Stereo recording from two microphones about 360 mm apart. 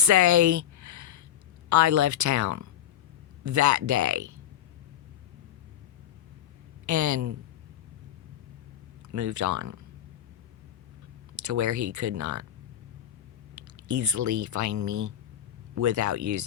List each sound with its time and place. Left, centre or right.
0.0 s a sound: right
1.7 s speech: right
6.8 s speech: right
9.1 s speech: right
11.3 s speech: right
13.6 s speech: right